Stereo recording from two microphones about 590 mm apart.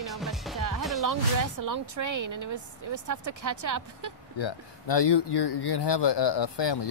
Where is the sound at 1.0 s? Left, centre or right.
Right.